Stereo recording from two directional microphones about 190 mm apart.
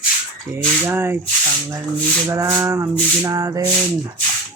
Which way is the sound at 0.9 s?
15° right (ahead or behind).